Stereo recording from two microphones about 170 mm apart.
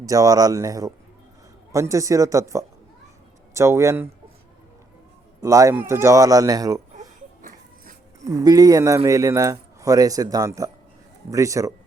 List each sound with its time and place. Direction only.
0.0 s speech: 20° right (ahead or behind)
5.4 s a man's voice: 15° right (ahead or behind)
8.2 s speech: 20° right (ahead or behind)